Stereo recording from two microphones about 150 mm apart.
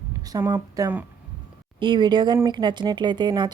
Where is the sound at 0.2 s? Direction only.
25° right (ahead or behind).